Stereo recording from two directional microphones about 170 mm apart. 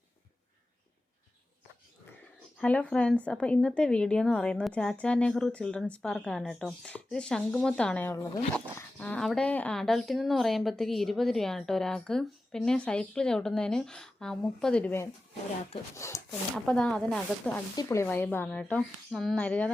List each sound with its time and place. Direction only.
2.6 s a woman's voice: 5° left (ahead or behind)
16.6 s a woman's voice: 5° left (ahead or behind)
17.7 s speech: 15° left (ahead or behind)